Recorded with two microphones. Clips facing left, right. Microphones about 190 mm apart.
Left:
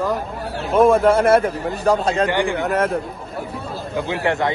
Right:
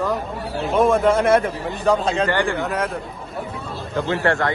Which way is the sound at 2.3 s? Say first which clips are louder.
Left 1 dB; 15° left (ahead or behind).